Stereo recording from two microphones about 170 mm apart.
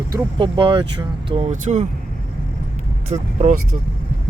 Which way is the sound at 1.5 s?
45° right (ahead or behind).